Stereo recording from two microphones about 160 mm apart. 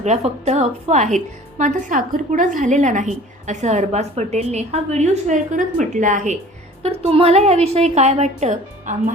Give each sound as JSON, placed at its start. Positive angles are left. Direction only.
{"t": 0.0, "sound": "a woman's voice", "side_deg": -45}
{"t": 6.8, "sound": "a woman's voice", "side_deg": -35}